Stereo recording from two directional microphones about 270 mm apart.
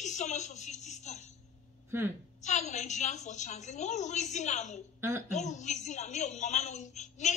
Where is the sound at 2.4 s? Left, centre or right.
Left.